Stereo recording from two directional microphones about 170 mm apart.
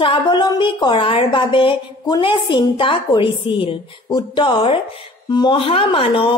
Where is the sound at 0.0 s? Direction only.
30° left (ahead or behind).